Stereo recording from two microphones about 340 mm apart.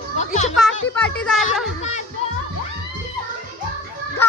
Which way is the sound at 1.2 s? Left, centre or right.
Centre.